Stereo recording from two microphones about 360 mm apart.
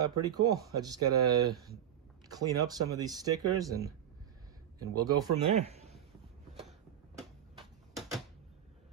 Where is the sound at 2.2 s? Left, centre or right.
Centre.